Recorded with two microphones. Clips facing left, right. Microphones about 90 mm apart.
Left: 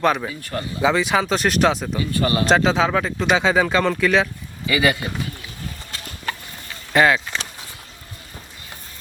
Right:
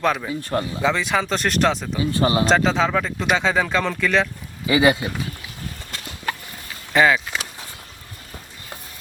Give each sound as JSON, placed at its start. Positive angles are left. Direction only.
{"t": 0.3, "sound": "speech", "side_deg": -30}
{"t": 0.8, "sound": "speech", "side_deg": 5}
{"t": 2.0, "sound": "speech", "side_deg": -25}
{"t": 2.5, "sound": "speech", "side_deg": 0}
{"t": 4.6, "sound": "speech", "side_deg": -20}
{"t": 6.3, "sound": "a sound", "side_deg": -10}
{"t": 6.9, "sound": "speech", "side_deg": 0}